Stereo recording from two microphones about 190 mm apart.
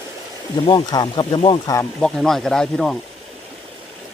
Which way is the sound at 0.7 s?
20° left (ahead or behind).